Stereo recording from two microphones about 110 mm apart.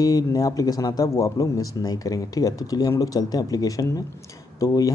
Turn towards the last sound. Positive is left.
turn(degrees=30)  # may be behind; listen again after turning